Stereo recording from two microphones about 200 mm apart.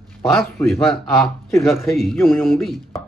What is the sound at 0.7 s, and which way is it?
Speech, centre (ahead or behind).